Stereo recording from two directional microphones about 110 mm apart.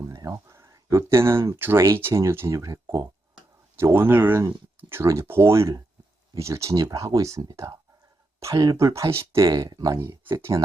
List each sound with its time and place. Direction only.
0.0 s speech: 30° right (ahead or behind)
3.8 s speech: 20° right (ahead or behind)